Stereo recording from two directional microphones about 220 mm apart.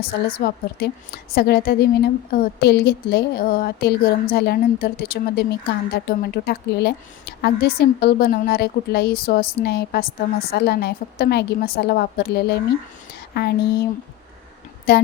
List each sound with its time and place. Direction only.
0.0 s a woman's voice: 45° left (ahead or behind)
13.1 s a sound: 45° left (ahead or behind)
14.9 s a woman's voice: 45° left (ahead or behind)